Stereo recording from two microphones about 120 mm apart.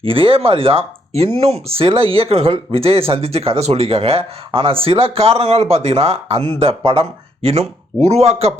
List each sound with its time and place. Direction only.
0.0 s speech: 50° right (ahead or behind)